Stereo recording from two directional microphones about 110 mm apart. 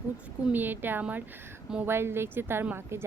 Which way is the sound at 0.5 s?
15° right (ahead or behind).